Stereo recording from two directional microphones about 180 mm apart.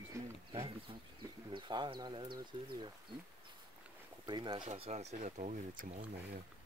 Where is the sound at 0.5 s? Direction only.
30° right (ahead or behind).